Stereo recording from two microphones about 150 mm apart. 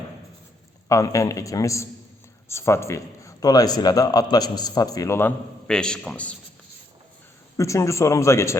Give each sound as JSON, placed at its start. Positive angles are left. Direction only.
{"t": 0.9, "sound": "a man's voice", "side_deg": 20}
{"t": 5.6, "sound": "a man's voice", "side_deg": 5}
{"t": 7.5, "sound": "a man's voice", "side_deg": 20}